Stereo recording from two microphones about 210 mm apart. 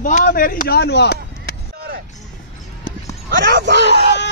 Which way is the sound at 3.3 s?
55° right (ahead or behind).